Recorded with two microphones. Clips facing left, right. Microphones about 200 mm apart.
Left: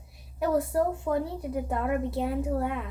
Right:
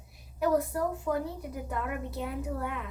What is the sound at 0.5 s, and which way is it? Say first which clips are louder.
A woman's voice: left 6 dB; 25° left (ahead or behind).